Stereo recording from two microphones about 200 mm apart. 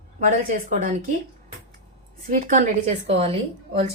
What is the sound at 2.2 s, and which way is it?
A woman's voice, 45° right (ahead or behind).